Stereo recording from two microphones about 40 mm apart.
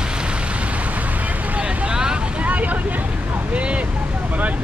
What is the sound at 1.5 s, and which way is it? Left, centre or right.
Vehicle, right.